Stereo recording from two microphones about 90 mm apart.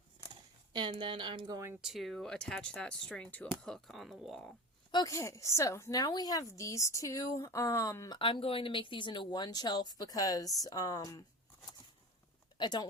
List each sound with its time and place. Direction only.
0.7 s speech: 65° right (ahead or behind)
1.8 s speech: centre (ahead or behind)
5.0 s speech: 35° left (ahead or behind)
5.9 s speech: 45° left (ahead or behind)
8.1 s speech: 75° left (ahead or behind); by 11.2 s 40° left (ahead or behind)
12.5 s speech: 55° left (ahead or behind)